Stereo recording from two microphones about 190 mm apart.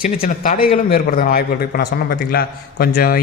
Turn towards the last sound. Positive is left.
turn(degrees=55)  # may be behind; listen again after turning